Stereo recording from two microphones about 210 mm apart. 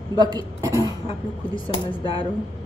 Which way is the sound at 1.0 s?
25° left (ahead or behind).